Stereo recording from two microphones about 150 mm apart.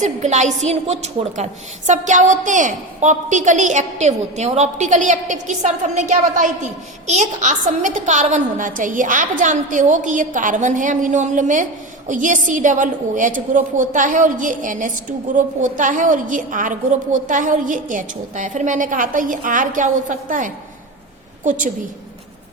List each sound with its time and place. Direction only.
0.0 s a woman's voice: 50° right (ahead or behind)